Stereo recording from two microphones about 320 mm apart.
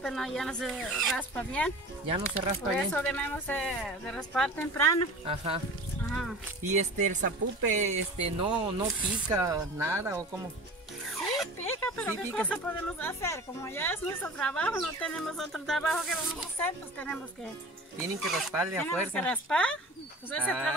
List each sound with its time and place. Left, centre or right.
0.0 s a woman's voice: centre
2.0 s speech: centre
2.9 s a woman's voice: centre
5.2 s speech: centre
6.7 s speech: right
8.5 s speech: centre
11.3 s a woman's voice: centre
18.2 s a woman's voice: centre
19.1 s a woman's voice: centre